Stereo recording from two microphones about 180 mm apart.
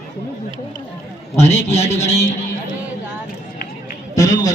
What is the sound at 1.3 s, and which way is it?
Speech, 15° left (ahead or behind).